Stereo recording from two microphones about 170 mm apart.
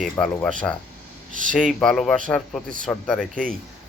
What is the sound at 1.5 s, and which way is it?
Speech, 5° left (ahead or behind).